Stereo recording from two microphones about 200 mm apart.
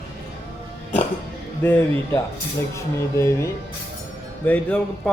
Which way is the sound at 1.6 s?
10° left (ahead or behind).